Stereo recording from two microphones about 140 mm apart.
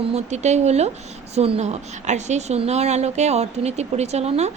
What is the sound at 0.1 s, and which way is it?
A woman's voice, 55° right (ahead or behind).